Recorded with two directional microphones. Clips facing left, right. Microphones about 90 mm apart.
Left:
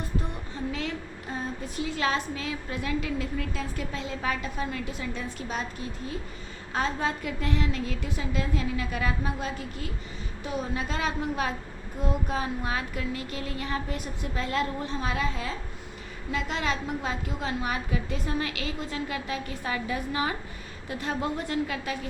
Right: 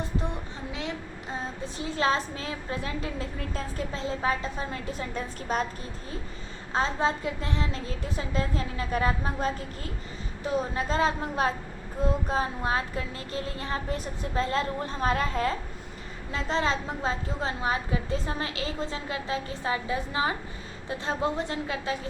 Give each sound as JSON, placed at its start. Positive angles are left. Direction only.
{"t": 0.7, "sound": "a woman's voice", "side_deg": -20}
{"t": 6.7, "sound": "a woman's voice", "side_deg": -25}
{"t": 16.3, "sound": "a woman's voice", "side_deg": -30}